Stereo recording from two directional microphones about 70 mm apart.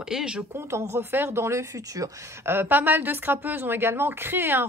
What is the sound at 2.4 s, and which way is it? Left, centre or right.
Speech, right.